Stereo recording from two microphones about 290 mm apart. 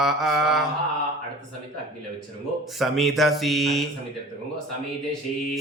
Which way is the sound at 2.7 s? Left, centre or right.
Centre.